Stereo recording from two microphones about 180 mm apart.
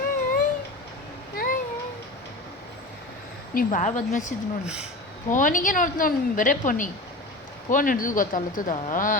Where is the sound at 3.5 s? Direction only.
45° left (ahead or behind).